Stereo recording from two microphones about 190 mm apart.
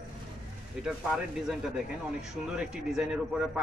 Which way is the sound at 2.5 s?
5° right (ahead or behind).